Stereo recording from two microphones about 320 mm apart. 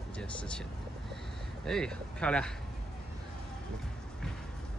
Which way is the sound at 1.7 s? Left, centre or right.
Centre.